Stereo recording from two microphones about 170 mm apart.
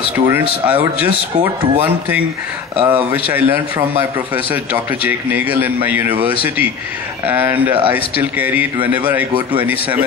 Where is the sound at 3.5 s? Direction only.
10° right (ahead or behind).